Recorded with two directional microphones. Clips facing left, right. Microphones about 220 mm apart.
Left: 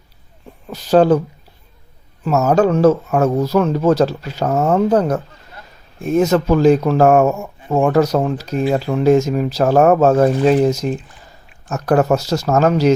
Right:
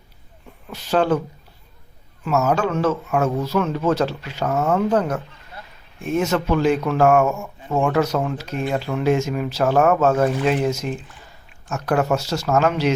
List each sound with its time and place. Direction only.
0.7 s speech: 40° left (ahead or behind)
2.2 s speech: 40° left (ahead or behind)